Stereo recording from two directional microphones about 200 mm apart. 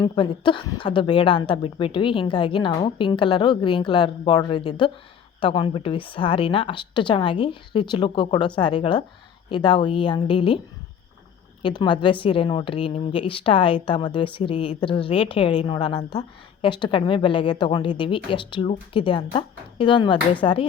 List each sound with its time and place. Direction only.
0.0 s a woman's voice: 25° left (ahead or behind)
11.6 s a woman's voice: 20° left (ahead or behind)